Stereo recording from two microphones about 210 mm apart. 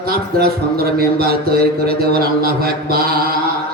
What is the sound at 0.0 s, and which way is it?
A man's voice, 45° right (ahead or behind).